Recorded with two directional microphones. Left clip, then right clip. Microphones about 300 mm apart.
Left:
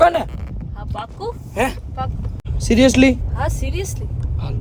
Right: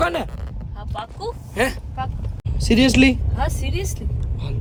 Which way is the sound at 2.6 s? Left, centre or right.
Centre.